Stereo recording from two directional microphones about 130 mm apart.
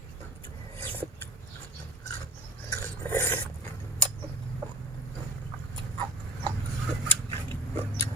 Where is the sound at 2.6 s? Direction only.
15° left (ahead or behind).